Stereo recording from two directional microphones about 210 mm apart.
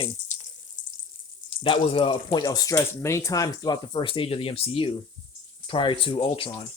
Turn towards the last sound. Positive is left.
turn(degrees=25)  # may be behind; listen again after turning